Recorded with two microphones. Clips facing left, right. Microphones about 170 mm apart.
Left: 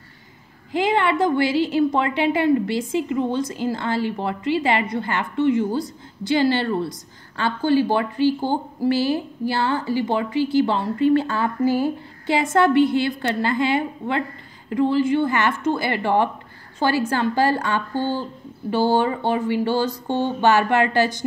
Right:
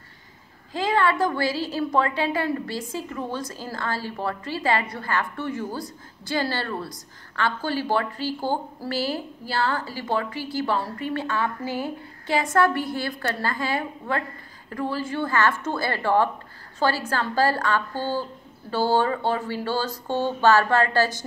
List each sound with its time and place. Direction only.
0.7 s a woman's voice: 25° left (ahead or behind)
11.6 s speech: 20° right (ahead or behind)
12.3 s a woman's voice: 25° left (ahead or behind)